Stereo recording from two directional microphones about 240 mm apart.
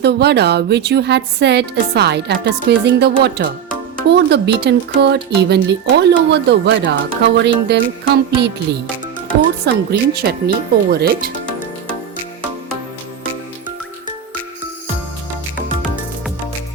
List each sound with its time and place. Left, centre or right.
0.0 s a woman's voice: right
9.6 s a woman's voice: right